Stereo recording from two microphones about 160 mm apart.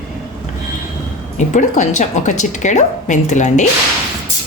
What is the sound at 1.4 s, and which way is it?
Speech, 50° left (ahead or behind).